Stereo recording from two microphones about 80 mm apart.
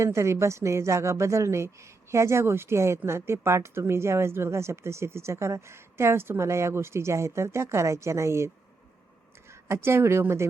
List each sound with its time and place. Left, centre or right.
0.0 s speech: right
9.5 s speech: right